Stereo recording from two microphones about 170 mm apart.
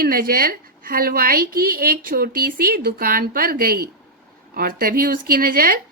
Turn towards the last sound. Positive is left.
turn(degrees=-55)  # may be behind; listen again after turning